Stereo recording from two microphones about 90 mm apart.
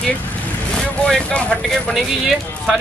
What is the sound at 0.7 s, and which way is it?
Speech, 10° left (ahead or behind).